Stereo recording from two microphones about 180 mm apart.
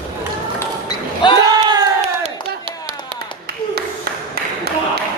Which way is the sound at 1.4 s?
20° right (ahead or behind).